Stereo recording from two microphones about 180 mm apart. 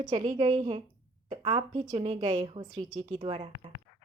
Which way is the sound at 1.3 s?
25° right (ahead or behind).